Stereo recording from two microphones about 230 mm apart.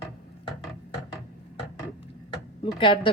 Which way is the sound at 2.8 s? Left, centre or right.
Left.